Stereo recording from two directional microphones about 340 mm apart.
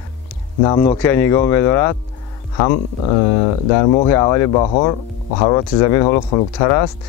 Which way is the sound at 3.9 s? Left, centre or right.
Centre.